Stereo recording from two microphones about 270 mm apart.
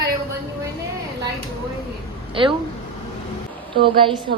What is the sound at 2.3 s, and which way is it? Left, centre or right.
Speech, centre.